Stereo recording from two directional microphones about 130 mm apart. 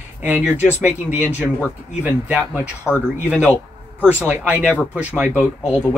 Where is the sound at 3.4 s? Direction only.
10° left (ahead or behind).